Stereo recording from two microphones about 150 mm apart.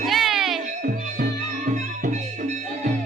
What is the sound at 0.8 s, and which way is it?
Music, 65° right (ahead or behind).